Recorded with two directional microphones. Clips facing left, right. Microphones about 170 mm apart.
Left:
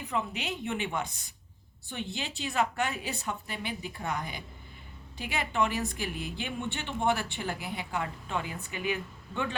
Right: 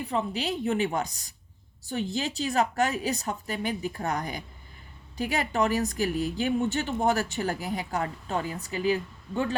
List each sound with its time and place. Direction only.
0.0 s speech: 35° right (ahead or behind)